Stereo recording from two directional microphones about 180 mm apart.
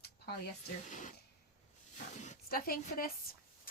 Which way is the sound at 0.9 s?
45° left (ahead or behind).